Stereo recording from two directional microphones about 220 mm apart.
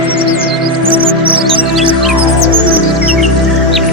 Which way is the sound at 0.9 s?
25° right (ahead or behind).